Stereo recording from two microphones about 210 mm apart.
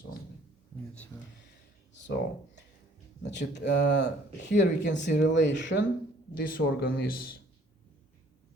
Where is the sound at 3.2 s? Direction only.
55° left (ahead or behind).